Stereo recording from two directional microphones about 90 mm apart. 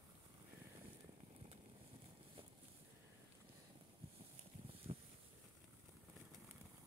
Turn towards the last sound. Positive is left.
turn(degrees=-90)